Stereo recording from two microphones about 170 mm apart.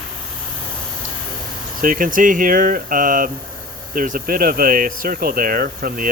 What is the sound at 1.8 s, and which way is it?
Speech, 55° right (ahead or behind).